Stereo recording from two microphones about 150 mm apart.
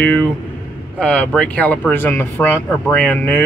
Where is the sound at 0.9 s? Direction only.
5° left (ahead or behind).